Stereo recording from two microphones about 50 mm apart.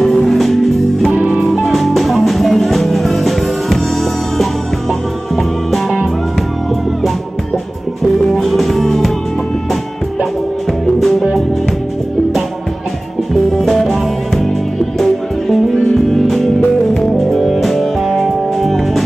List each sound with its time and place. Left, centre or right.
0.0 s music: centre
8.2 s music: centre
11.0 s music: centre
13.6 s music: centre